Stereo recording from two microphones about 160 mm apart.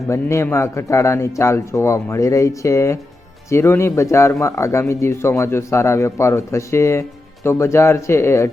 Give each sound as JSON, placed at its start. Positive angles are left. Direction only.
{"t": 0.1, "sound": "speech", "side_deg": 15}